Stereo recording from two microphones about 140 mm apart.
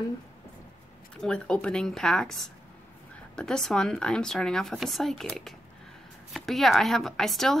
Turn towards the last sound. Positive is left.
turn(degrees=0)  # may be behind; listen again after turning